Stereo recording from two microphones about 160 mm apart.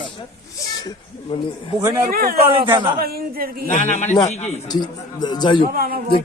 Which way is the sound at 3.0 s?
70° right (ahead or behind).